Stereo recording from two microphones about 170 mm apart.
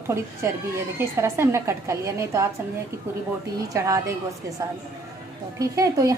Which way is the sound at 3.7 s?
20° right (ahead or behind).